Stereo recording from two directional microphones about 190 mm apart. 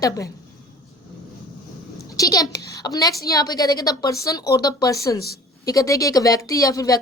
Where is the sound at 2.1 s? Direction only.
20° left (ahead or behind).